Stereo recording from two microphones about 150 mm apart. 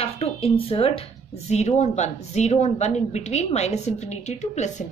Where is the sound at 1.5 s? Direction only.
50° left (ahead or behind).